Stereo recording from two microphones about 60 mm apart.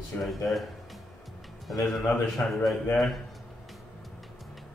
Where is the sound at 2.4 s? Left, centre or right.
Left.